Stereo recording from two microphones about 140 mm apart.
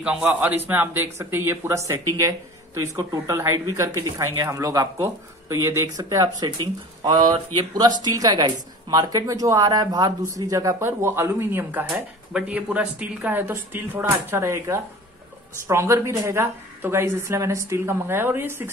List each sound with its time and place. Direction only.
0.0 s a man's voice: 10° right (ahead or behind)